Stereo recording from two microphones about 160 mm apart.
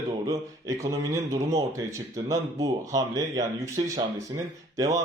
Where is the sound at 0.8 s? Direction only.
20° right (ahead or behind).